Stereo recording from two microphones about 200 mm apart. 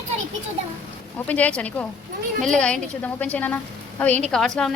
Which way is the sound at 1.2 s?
5° left (ahead or behind).